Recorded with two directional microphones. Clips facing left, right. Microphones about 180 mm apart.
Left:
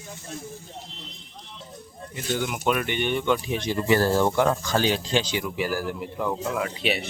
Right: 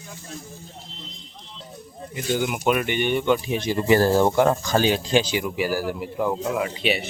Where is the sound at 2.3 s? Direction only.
10° right (ahead or behind).